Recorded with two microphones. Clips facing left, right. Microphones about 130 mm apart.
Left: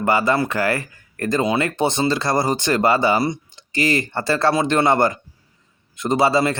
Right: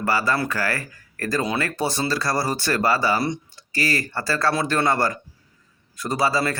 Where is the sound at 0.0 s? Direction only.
20° left (ahead or behind).